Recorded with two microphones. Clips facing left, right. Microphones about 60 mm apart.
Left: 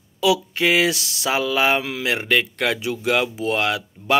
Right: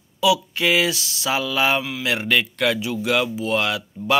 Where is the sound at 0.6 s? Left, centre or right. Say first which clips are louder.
Left 1 dB; left.